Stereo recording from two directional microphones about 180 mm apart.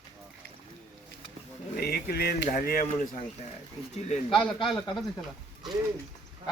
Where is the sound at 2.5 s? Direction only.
50° left (ahead or behind).